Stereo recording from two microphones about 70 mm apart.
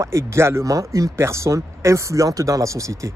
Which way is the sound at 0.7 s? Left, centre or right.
Right.